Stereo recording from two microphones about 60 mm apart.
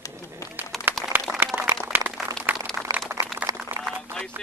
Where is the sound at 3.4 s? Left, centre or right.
Right.